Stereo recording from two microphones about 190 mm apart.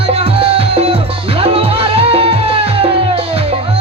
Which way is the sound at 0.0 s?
30° right (ahead or behind).